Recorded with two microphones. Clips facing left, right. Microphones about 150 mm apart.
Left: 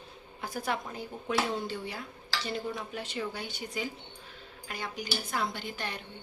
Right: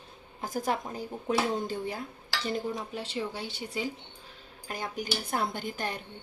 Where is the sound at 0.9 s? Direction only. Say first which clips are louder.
Right 3 dB; 40° right (ahead or behind).